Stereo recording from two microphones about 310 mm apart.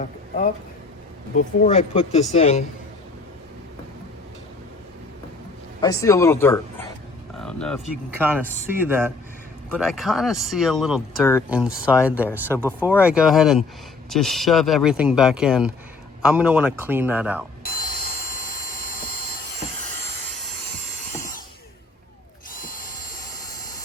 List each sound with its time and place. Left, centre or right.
1.4 s speech: left
5.8 s speech: centre
7.3 s a sound: centre
8.2 s speech: centre
17.6 s tools: left
22.5 s drill: left